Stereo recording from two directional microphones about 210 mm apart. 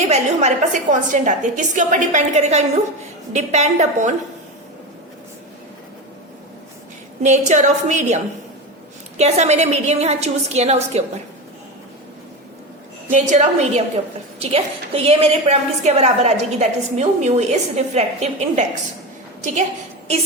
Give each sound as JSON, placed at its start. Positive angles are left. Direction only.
{"t": 0.1, "sound": "a woman's voice", "side_deg": -35}
{"t": 7.2, "sound": "a woman's voice", "side_deg": -35}
{"t": 13.1, "sound": "a woman's voice", "side_deg": -35}